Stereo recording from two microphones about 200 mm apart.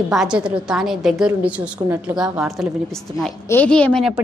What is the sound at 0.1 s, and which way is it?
A woman's voice, 5° right (ahead or behind).